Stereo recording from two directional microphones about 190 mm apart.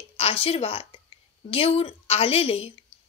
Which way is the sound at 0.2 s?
30° left (ahead or behind).